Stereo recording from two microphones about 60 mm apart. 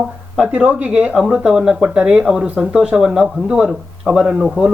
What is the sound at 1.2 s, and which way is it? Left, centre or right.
Speech, centre.